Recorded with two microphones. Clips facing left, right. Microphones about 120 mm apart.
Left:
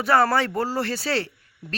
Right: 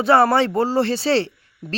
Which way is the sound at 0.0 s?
25° right (ahead or behind).